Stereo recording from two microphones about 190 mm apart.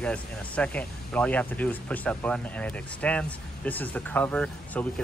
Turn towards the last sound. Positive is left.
turn(degrees=5)  # may be behind; listen again after turning